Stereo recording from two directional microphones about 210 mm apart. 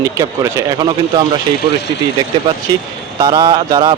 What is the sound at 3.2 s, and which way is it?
Speech, 20° right (ahead or behind).